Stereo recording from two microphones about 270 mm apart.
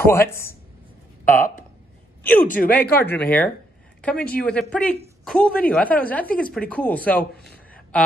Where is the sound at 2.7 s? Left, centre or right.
Centre.